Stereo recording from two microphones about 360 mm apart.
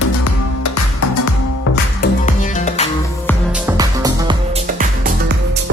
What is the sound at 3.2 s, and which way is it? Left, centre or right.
Music, centre.